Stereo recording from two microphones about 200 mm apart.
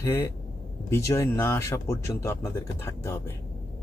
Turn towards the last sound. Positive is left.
turn(degrees=15)  # may be behind; listen again after turning